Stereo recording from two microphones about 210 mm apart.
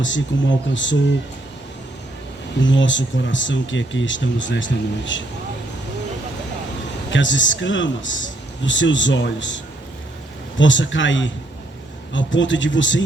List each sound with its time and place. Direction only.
0.0 s speech: 60° left (ahead or behind)
2.6 s speech: 60° left (ahead or behind)
7.1 s speech: 60° left (ahead or behind)
10.6 s speech: 60° left (ahead or behind)